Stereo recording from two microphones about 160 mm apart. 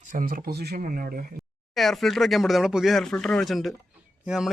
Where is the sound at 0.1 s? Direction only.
60° right (ahead or behind).